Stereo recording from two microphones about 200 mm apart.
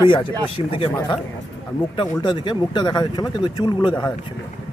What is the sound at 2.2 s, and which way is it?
Speech, 25° left (ahead or behind).